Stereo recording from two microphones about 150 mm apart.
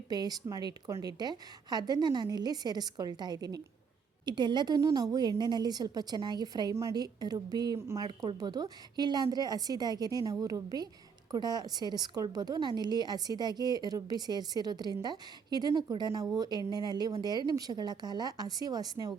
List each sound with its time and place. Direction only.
0.1 s a woman's voice: 25° right (ahead or behind)